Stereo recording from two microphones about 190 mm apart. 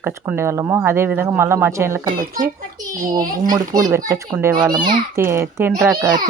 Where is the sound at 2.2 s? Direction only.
45° right (ahead or behind).